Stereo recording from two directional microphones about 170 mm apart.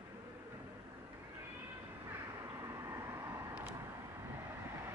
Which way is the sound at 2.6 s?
15° right (ahead or behind).